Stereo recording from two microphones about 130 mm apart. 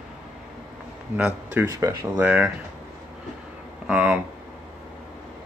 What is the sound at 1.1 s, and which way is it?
Speech, 15° right (ahead or behind).